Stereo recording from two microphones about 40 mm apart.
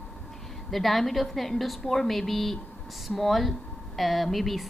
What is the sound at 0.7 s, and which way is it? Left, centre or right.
A woman's voice, centre.